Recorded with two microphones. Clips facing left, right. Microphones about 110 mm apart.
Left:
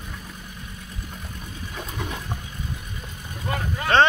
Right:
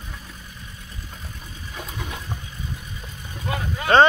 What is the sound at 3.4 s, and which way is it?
Vehicle, 5° right (ahead or behind).